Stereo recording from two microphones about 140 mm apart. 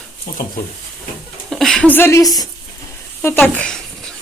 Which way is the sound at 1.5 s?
5° left (ahead or behind).